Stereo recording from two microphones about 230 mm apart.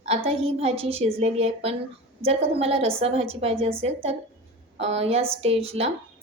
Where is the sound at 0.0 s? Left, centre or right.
Right.